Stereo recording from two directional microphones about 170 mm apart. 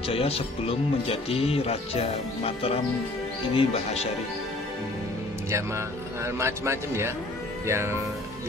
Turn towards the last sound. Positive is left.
turn(degrees=-15)  # may be behind; listen again after turning